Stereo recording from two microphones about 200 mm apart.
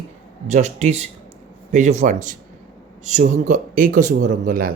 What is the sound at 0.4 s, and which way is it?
Speech, 35° right (ahead or behind).